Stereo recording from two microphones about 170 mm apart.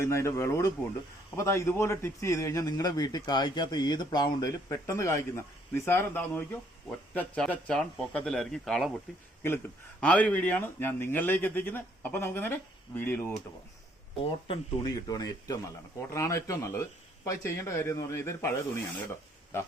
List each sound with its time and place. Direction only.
0.0 s a man's voice: 15° left (ahead or behind)
10.0 s speech: 10° left (ahead or behind)
14.2 s speech: 35° left (ahead or behind)
14.8 s a man's voice: 20° left (ahead or behind)